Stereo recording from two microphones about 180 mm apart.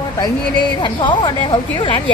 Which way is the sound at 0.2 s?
25° left (ahead or behind).